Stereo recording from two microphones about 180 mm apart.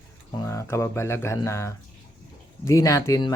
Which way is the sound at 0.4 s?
15° left (ahead or behind).